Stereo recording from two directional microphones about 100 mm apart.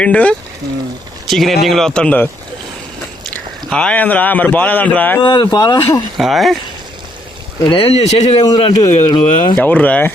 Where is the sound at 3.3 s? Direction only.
10° left (ahead or behind).